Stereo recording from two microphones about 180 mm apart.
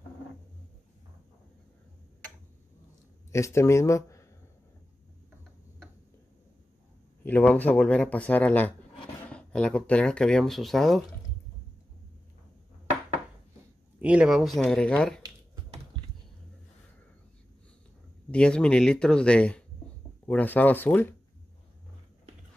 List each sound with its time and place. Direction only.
3.3 s speech: 15° left (ahead or behind)
7.2 s a man's voice: 10° left (ahead or behind)
13.9 s speech: 5° right (ahead or behind)
18.3 s a man's voice: 5° left (ahead or behind)